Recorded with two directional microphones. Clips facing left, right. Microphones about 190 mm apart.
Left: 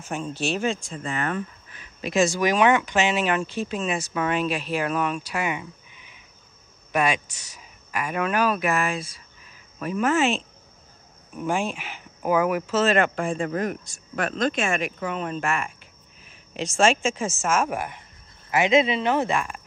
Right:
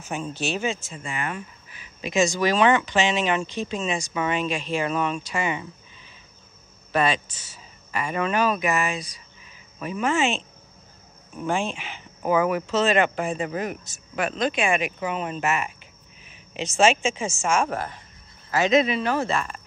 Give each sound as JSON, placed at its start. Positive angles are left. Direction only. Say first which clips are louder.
{"t": 0.0, "sound": "speech", "louder": "left 1 dB", "side_deg": 0}
{"t": 2.0, "sound": "speech", "louder": "left 1 dB", "side_deg": 0}
{"t": 18.5, "sound": "speech", "louder": "even", "side_deg": 25}